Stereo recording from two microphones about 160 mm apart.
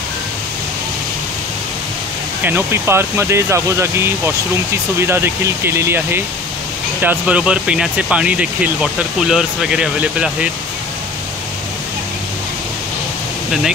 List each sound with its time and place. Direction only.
2.4 s speech: 15° right (ahead or behind)